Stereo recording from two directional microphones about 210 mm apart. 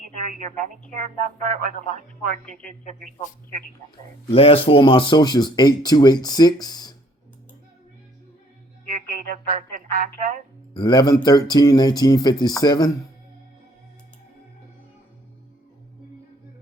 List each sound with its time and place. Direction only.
0.3 s speech: 35° right (ahead or behind)
4.3 s speech: 25° left (ahead or behind)
9.0 s speech: 40° right (ahead or behind)
10.8 s speech: 20° left (ahead or behind)